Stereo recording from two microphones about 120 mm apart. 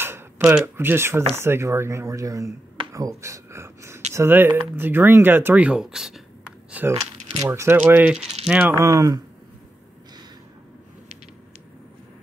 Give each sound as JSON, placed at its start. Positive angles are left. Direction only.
{"t": 0.5, "sound": "speech", "side_deg": -20}
{"t": 6.7, "sound": "speech", "side_deg": -15}
{"t": 7.3, "sound": "speech", "side_deg": -25}
{"t": 8.7, "sound": "speech", "side_deg": -30}